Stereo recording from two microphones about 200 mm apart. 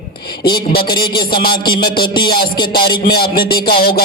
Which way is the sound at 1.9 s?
20° left (ahead or behind).